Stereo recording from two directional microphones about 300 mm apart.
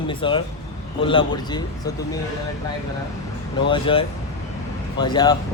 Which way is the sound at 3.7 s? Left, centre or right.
Centre.